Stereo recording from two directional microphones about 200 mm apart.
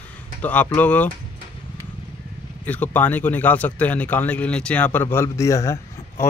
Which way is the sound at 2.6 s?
10° left (ahead or behind).